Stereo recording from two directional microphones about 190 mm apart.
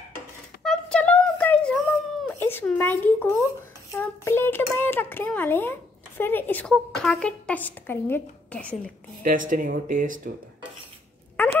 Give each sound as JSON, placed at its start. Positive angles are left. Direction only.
{"t": 0.7, "sound": "a sound", "side_deg": 5}
{"t": 3.9, "sound": "a child's voice", "side_deg": 10}
{"t": 9.2, "sound": "speech", "side_deg": -45}